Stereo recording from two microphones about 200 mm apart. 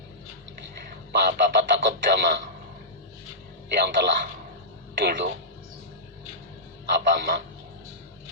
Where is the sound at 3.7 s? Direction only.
55° right (ahead or behind).